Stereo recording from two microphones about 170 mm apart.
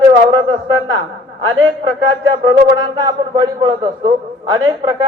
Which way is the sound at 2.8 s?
25° right (ahead or behind).